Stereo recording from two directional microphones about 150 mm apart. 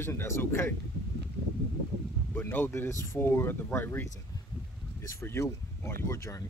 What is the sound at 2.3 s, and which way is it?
Speech, 15° left (ahead or behind).